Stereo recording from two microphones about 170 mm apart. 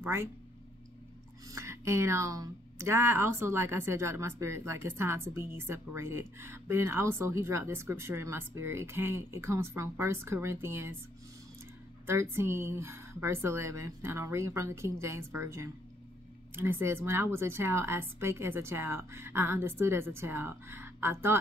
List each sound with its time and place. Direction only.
0.0 s speech: 15° right (ahead or behind)
1.5 s speech: 15° right (ahead or behind)
12.1 s speech: 15° right (ahead or behind)